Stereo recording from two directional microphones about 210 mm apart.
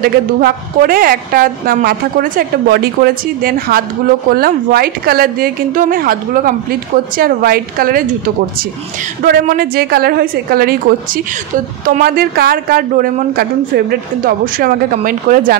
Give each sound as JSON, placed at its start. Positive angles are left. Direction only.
{"t": 0.0, "sound": "a woman's voice", "side_deg": -45}
{"t": 9.2, "sound": "a woman's voice", "side_deg": -45}
{"t": 11.8, "sound": "a woman's voice", "side_deg": -45}